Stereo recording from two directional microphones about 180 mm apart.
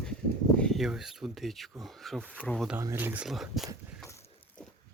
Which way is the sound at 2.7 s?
10° right (ahead or behind).